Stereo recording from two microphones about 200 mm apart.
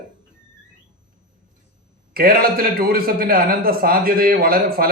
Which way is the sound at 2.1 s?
50° right (ahead or behind).